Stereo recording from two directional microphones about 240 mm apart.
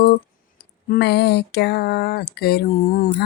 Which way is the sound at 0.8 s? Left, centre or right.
Left.